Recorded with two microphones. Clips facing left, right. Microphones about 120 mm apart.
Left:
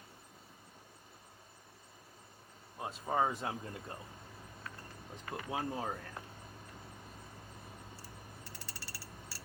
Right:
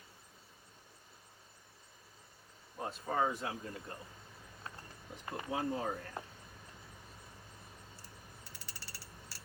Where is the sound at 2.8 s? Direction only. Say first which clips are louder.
Left 1 dB; 15° left (ahead or behind).